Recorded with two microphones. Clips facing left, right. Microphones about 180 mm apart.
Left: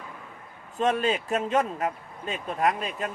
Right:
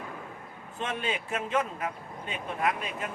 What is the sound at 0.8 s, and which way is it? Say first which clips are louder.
Speech: left 8 dB; 40° left (ahead or behind).